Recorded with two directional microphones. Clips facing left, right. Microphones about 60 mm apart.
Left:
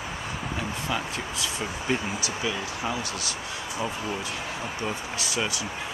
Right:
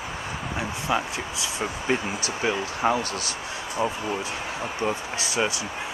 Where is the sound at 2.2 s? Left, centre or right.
Right.